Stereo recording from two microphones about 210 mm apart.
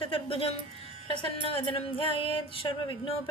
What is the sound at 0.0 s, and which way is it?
Speech, 25° left (ahead or behind).